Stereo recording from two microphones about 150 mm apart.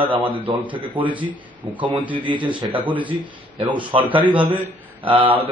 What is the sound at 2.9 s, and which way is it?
Speech, 10° right (ahead or behind).